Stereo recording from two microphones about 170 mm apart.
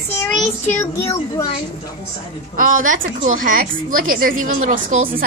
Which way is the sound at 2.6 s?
50° right (ahead or behind).